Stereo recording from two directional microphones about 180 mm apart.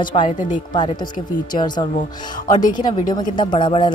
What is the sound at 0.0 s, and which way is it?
A woman's voice, 25° left (ahead or behind).